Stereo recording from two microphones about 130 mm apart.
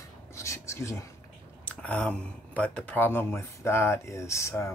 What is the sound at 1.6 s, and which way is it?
Speech, 10° left (ahead or behind).